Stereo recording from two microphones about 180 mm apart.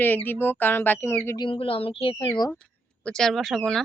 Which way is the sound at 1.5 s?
30° left (ahead or behind).